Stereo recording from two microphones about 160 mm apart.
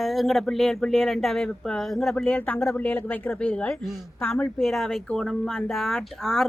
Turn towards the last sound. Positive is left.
turn(degrees=0)  # may be behind; listen again after turning